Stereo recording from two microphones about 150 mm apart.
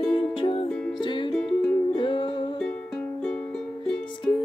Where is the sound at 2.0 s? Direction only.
35° left (ahead or behind).